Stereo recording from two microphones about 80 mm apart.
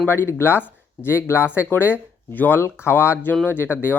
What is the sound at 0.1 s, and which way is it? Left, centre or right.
Speech, left.